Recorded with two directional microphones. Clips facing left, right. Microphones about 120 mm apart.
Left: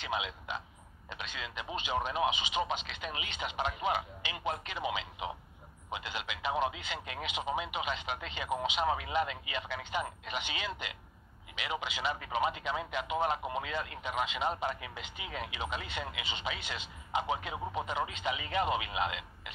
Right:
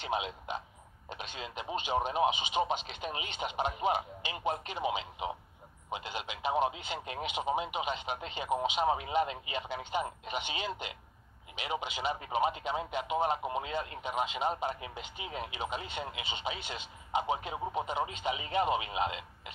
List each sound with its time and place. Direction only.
0.1 s a man's voice: 45° right (ahead or behind)